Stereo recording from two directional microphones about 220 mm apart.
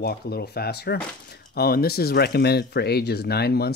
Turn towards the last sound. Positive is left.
turn(degrees=45)  # may be behind; listen again after turning